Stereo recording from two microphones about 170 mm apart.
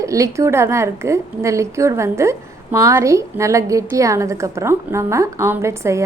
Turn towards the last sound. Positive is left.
turn(degrees=-15)  # may be behind; listen again after turning